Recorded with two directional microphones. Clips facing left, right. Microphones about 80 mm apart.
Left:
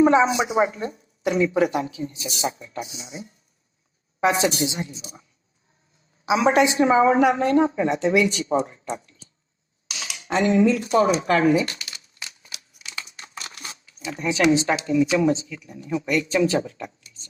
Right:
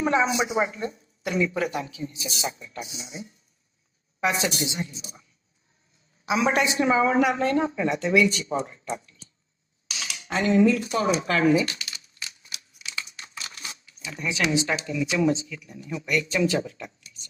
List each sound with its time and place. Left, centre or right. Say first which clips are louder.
0.0 s a woman's voice: left 6 dB; left
4.2 s a woman's voice: left 5 dB; left
6.4 s a woman's voice: left 5 dB; left
9.9 s a sound: left 4 dB; left
10.6 s a woman's voice: left 3 dB; left
12.2 s a sound: left 1 dB; left
15.4 s speech: left 4 dB; left